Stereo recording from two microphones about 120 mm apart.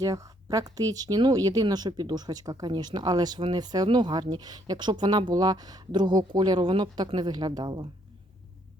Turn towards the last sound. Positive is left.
turn(degrees=-35)  # may be behind; listen again after turning